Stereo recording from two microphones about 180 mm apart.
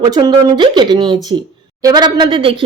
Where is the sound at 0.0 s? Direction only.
25° right (ahead or behind).